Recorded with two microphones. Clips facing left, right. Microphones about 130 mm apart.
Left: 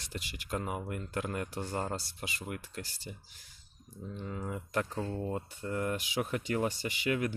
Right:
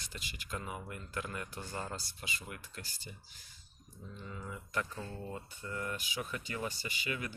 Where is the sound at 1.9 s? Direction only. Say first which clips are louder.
Left 5 dB; 70° left (ahead or behind).